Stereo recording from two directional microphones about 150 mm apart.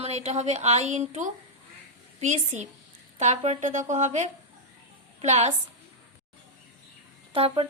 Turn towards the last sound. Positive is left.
turn(degrees=-40)  # may be behind; listen again after turning